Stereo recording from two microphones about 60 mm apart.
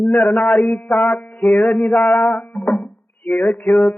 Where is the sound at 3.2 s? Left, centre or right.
Left.